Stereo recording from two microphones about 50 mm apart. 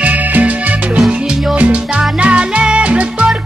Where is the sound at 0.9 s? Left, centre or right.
Centre.